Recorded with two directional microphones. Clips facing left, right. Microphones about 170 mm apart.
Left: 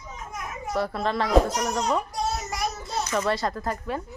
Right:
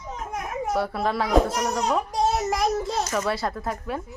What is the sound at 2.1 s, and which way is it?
Child singing, 80° right.